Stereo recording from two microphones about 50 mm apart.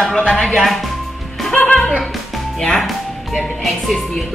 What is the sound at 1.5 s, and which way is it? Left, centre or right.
Music, left.